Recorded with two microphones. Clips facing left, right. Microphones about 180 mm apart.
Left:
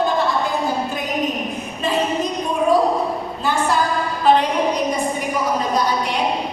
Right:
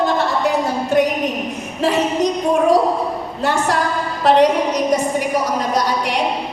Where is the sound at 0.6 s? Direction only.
75° right (ahead or behind).